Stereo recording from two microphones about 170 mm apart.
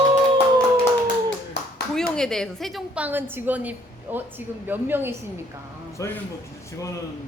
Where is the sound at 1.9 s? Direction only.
5° left (ahead or behind); by 5.1 s 10° right (ahead or behind).